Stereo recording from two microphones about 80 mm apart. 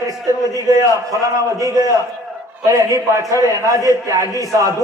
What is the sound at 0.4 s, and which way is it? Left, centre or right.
A man's voice, right.